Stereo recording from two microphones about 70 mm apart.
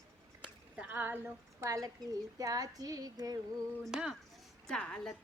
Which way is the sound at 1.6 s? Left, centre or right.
Right.